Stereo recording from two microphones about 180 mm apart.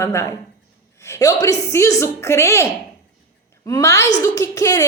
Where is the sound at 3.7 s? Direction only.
15° left (ahead or behind).